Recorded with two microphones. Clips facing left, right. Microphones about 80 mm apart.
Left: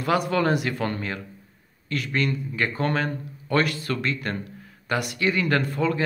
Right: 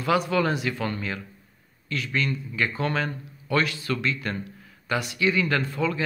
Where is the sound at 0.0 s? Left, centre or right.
Left.